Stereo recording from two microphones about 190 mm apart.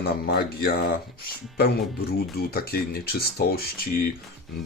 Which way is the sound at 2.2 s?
55° left (ahead or behind).